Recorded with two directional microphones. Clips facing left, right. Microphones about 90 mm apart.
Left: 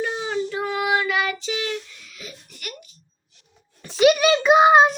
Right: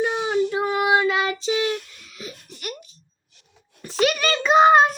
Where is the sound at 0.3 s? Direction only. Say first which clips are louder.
Right 4 dB; 15° right (ahead or behind).